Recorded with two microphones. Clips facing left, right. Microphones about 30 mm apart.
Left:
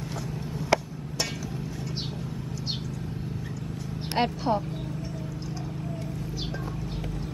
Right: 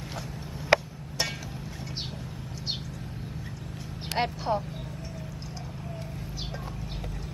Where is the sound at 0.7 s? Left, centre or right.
Right.